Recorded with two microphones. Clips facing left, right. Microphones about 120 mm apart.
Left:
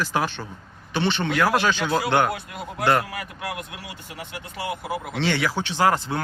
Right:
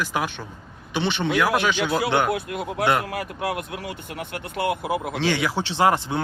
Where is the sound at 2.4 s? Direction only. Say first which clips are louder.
Even; 60° right (ahead or behind).